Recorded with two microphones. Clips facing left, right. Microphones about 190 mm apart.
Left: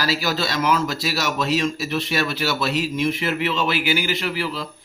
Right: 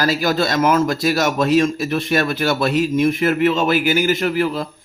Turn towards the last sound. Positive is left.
turn(degrees=-50)  # may be behind; listen again after turning